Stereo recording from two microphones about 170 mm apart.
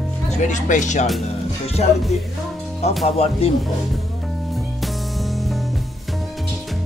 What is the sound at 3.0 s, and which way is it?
Speech, 35° left (ahead or behind).